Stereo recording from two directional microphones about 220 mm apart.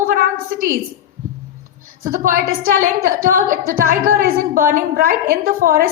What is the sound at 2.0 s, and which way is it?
A woman's voice, 40° right (ahead or behind).